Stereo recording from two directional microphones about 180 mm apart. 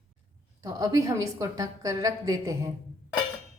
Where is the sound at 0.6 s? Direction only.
20° right (ahead or behind).